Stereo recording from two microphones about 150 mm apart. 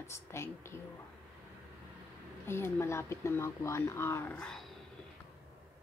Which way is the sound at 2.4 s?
15° left (ahead or behind).